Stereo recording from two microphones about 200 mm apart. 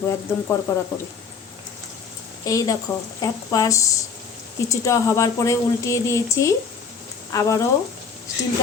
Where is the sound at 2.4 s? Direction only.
15° left (ahead or behind).